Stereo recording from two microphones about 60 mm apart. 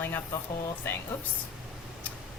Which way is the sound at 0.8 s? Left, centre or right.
Left.